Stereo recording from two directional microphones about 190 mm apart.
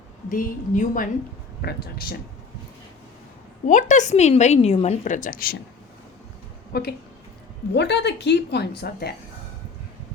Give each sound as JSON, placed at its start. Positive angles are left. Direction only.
{"t": 0.3, "sound": "a woman's voice", "side_deg": 45}
{"t": 1.6, "sound": "a woman's voice", "side_deg": 55}
{"t": 3.7, "sound": "a woman's voice", "side_deg": 40}
{"t": 6.7, "sound": "a woman's voice", "side_deg": 55}